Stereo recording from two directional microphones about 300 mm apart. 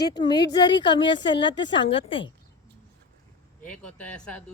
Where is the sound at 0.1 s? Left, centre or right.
Centre.